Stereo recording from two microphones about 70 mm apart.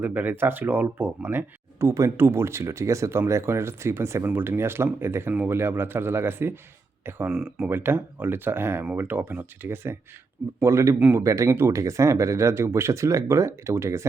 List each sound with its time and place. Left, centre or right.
0.0 s speech: right
7.3 s speech: centre
7.7 s speech: right
10.6 s speech: right
11.5 s speech: right
11.8 s speech: right